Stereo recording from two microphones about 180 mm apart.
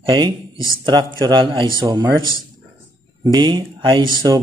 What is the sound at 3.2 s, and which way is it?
Speech, 25° right (ahead or behind).